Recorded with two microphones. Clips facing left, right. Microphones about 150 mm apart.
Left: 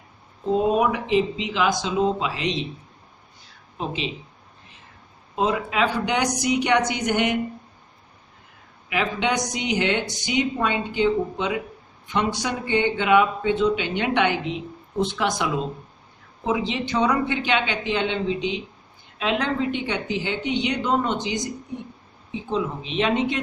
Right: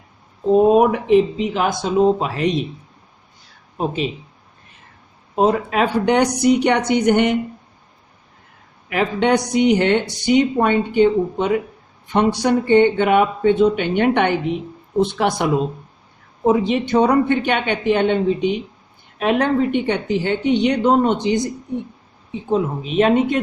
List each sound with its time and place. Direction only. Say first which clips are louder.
0.8 s speech: right 7 dB; 50° right (ahead or behind)
3.8 s speech: right 7 dB; 50° right (ahead or behind)
5.4 s a woman's voice: right 6 dB; 55° right (ahead or behind)
8.9 s a woman's voice: right 7 dB; 55° right (ahead or behind)